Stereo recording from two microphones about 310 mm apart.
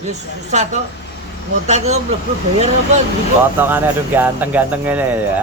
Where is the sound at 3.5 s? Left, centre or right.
Centre.